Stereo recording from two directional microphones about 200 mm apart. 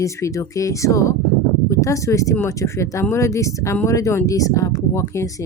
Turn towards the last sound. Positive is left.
turn(degrees=15)  # may be behind; listen again after turning